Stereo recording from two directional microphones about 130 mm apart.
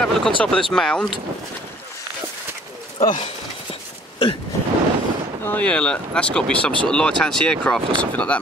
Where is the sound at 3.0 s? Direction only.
40° left (ahead or behind).